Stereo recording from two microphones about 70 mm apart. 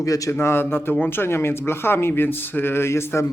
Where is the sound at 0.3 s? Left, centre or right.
Left.